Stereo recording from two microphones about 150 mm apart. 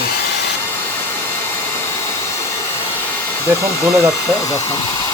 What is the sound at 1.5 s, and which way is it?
Hair dryer, 15° left (ahead or behind).